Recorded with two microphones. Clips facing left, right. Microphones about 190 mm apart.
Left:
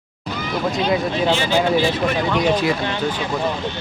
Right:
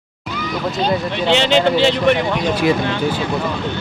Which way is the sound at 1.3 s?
75° right (ahead or behind).